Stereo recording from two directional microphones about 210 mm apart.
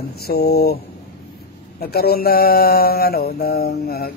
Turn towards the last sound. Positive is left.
turn(degrees=50)  # may be behind; listen again after turning